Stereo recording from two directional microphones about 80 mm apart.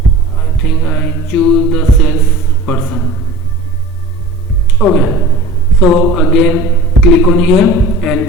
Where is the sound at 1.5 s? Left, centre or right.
Centre.